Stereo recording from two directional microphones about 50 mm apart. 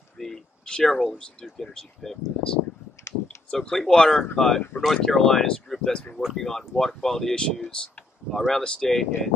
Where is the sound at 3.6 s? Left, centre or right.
Centre.